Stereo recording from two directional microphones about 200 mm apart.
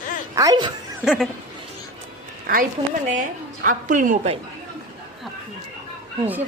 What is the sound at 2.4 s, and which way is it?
A woman's voice, 45° right (ahead or behind).